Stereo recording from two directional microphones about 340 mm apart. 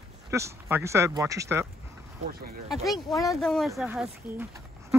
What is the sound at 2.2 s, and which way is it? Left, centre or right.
Speech, right.